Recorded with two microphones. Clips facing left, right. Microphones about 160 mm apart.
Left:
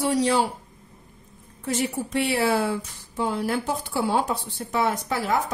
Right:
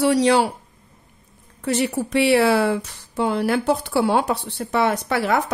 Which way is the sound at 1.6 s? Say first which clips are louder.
Right 5 dB; 75° right (ahead or behind).